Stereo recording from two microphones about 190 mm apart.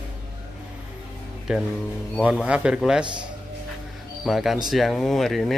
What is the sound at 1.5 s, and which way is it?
Speech, 5° right (ahead or behind).